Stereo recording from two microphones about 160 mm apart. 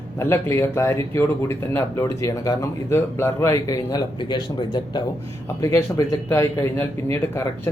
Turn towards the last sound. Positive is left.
turn(degrees=15)  # may be behind; listen again after turning